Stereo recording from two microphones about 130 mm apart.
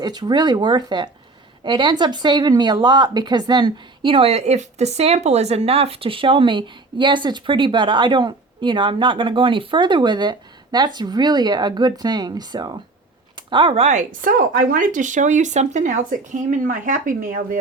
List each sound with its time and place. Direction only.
0.0 s speech: 35° right (ahead or behind)
13.3 s a sound: 40° right (ahead or behind)
13.8 s speech: 80° right